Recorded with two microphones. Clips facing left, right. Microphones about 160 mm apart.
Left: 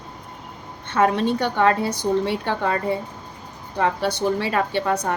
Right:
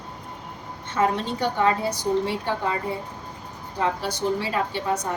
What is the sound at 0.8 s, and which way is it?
A woman's voice, 65° left (ahead or behind).